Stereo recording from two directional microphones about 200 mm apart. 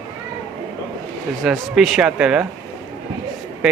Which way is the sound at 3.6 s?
Centre (ahead or behind).